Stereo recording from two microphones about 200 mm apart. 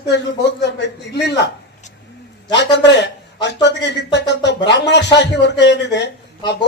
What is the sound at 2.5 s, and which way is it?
Speech, 60° left (ahead or behind).